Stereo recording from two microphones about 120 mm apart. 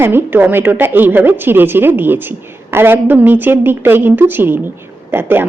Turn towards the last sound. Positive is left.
turn(degrees=-20)  # may be behind; listen again after turning